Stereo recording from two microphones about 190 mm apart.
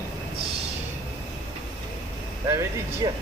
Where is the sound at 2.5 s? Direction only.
15° right (ahead or behind).